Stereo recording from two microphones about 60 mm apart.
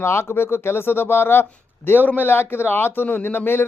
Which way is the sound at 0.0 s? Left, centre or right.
Left.